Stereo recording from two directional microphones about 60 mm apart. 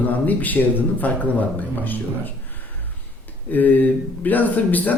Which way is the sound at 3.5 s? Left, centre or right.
Left.